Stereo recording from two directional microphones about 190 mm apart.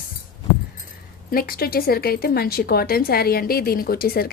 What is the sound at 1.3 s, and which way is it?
Speech, 50° left (ahead or behind).